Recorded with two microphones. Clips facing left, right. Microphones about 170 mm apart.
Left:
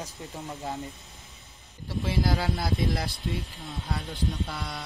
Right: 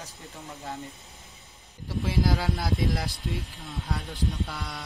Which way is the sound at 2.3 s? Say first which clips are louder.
Even; centre (ahead or behind).